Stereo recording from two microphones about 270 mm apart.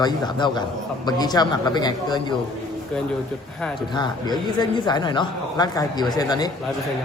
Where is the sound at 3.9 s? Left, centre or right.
Centre.